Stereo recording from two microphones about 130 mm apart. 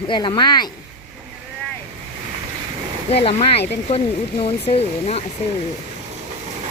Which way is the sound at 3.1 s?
50° left (ahead or behind).